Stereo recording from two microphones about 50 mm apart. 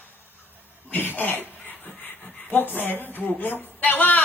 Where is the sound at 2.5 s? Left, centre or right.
Left.